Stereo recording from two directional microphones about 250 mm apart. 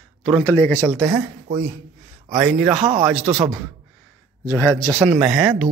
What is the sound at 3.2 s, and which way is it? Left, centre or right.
Speech, right.